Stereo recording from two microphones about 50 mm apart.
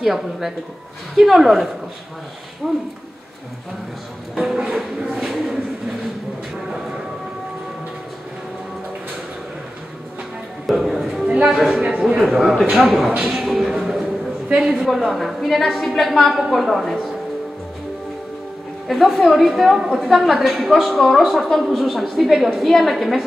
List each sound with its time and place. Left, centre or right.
0.0 s a woman's voice: centre
4.4 s speech: centre
10.7 s a sound: centre
11.4 s a woman's voice: centre
11.8 s speech: centre
12.2 s a woman's voice: centre
18.9 s a woman's voice: centre